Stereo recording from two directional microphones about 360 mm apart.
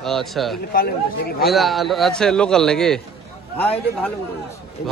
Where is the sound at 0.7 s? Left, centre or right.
Left.